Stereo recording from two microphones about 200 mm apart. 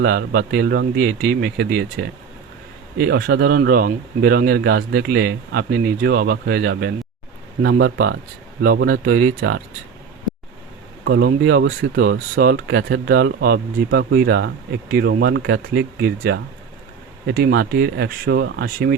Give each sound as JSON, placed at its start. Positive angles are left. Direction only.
{"t": 0.0, "sound": "speech", "side_deg": -50}
{"t": 11.0, "sound": "speech", "side_deg": -55}
{"t": 12.0, "sound": "speech", "side_deg": -55}